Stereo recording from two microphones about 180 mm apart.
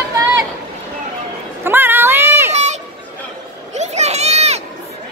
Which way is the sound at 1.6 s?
10° right (ahead or behind).